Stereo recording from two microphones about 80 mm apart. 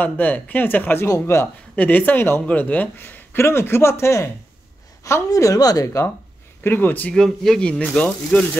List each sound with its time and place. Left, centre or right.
0.0 s speech: left
1.0 s a man's voice: left
1.8 s a man's voice: left
6.6 s speech: left
7.2 s speech: centre